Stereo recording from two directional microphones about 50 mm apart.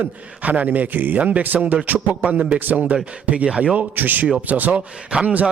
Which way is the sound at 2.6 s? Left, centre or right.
Right.